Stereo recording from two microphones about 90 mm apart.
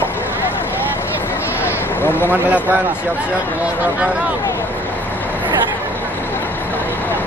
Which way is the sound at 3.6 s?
20° right (ahead or behind).